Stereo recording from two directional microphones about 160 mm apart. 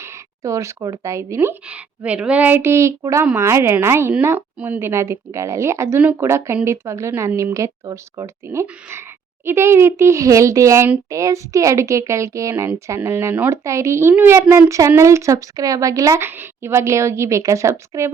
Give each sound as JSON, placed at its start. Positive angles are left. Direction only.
{"t": 0.0, "sound": "a woman's voice", "side_deg": -20}